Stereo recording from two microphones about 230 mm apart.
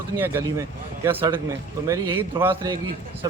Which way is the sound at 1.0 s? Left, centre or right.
Centre.